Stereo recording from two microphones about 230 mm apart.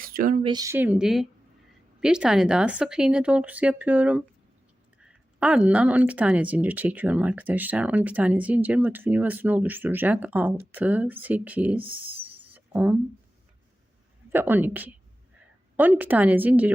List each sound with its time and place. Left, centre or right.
0.0 s speech: right
0.4 s speech: centre
11.8 s speech: right
12.5 s a sound: centre
14.3 s speech: centre